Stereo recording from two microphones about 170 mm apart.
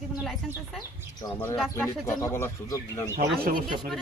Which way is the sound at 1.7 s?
15° left (ahead or behind).